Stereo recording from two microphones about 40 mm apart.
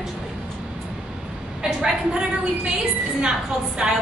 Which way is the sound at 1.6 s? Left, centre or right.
Centre.